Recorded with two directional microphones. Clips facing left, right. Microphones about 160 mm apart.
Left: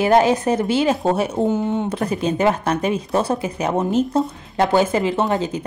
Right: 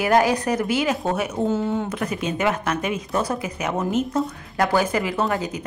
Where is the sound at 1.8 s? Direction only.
30° left (ahead or behind).